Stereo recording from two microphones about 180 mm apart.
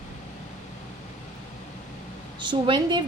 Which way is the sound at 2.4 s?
25° right (ahead or behind).